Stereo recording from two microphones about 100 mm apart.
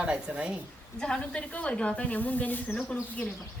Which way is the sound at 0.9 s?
10° left (ahead or behind).